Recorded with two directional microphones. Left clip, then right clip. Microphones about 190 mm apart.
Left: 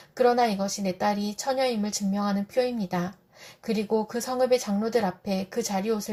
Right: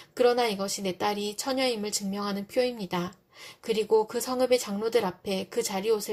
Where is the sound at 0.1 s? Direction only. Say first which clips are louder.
Left 2 dB; 35° right (ahead or behind).